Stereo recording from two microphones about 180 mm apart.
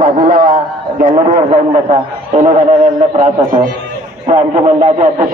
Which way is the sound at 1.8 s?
35° right (ahead or behind).